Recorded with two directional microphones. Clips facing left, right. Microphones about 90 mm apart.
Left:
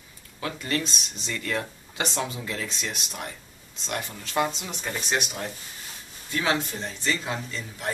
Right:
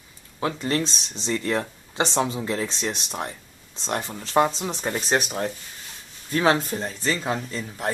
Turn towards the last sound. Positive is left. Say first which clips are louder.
# right 4 dB
turn(degrees=-40)  # may be behind; listen again after turning